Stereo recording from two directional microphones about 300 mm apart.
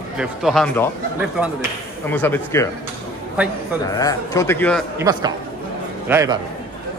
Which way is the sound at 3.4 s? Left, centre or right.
Centre.